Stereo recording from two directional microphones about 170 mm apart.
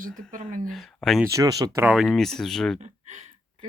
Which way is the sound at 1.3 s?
20° right (ahead or behind).